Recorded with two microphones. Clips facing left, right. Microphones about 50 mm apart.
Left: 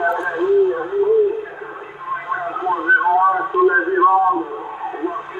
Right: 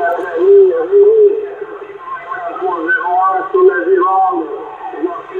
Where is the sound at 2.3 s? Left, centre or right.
Centre.